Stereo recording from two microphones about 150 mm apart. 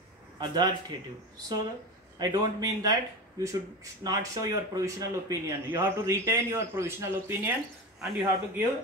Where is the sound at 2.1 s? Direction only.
25° right (ahead or behind).